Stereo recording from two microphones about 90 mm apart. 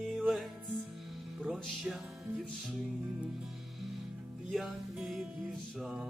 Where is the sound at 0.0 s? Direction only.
Centre (ahead or behind).